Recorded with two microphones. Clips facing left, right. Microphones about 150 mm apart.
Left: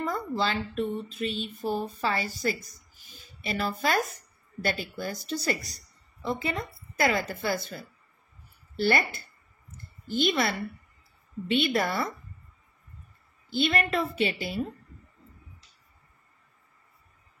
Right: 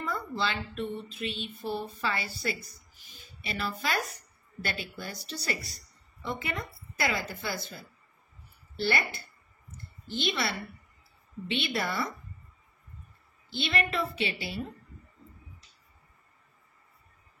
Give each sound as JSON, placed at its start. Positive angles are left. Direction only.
{"t": 0.0, "sound": "a woman's voice", "side_deg": 40}
{"t": 7.1, "sound": "a woman's voice", "side_deg": 50}
{"t": 13.5, "sound": "a woman's voice", "side_deg": 45}